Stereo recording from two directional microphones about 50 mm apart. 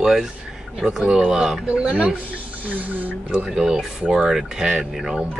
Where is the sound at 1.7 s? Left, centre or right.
Right.